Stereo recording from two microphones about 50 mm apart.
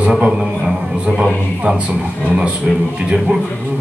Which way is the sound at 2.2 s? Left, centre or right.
Right.